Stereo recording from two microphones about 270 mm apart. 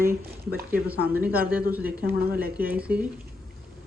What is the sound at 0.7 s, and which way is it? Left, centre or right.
Speech, centre.